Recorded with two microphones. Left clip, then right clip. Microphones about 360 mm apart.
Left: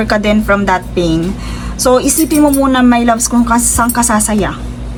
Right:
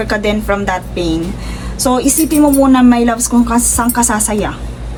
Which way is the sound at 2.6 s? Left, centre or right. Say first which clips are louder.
Right 1 dB; centre.